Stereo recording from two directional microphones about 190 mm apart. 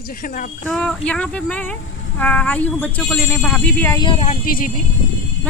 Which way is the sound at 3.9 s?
30° left (ahead or behind).